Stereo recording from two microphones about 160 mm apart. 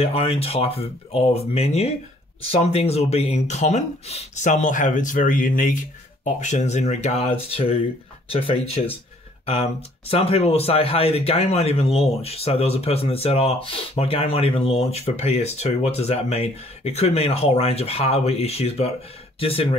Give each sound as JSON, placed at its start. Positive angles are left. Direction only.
{"t": 0.0, "sound": "speech", "side_deg": 35}